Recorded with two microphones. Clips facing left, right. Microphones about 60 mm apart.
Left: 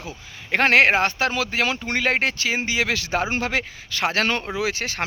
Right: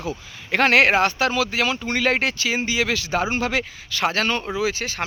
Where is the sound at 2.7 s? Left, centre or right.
Left.